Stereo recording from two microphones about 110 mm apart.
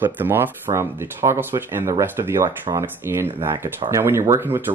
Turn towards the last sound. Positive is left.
turn(degrees=-20)  # may be behind; listen again after turning